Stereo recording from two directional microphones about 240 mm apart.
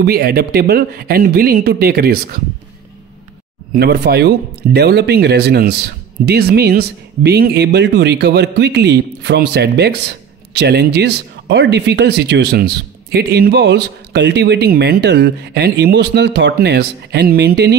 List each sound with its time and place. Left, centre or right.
0.0 s speech: right
3.7 s speech: right